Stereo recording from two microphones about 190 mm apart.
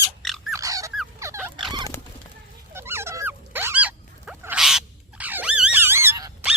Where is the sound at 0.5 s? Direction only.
15° right (ahead or behind).